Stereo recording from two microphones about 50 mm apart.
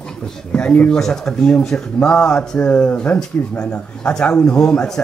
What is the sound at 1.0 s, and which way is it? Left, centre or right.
Speech, centre.